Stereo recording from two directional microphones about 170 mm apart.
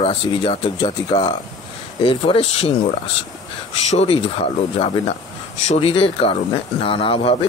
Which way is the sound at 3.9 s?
35° left (ahead or behind).